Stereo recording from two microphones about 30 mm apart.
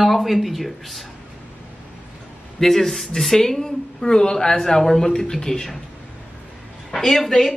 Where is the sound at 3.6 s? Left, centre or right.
Left.